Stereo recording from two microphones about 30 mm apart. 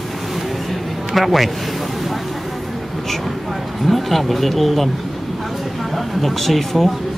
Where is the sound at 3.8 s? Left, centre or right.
Centre.